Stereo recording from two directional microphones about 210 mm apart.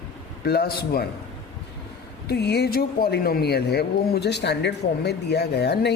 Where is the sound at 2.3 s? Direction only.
50° left (ahead or behind).